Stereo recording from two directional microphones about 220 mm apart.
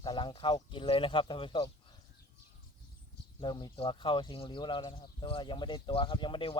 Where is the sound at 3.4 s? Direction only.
20° left (ahead or behind).